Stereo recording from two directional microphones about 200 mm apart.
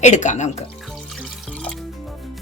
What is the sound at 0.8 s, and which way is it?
Music, centre (ahead or behind).